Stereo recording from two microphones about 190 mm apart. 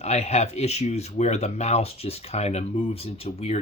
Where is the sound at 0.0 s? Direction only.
35° left (ahead or behind).